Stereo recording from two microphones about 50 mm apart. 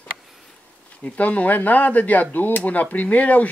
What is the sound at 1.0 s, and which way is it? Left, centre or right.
Speech, left.